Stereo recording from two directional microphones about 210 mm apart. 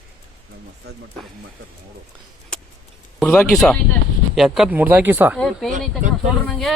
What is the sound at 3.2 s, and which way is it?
Speech, 10° left (ahead or behind).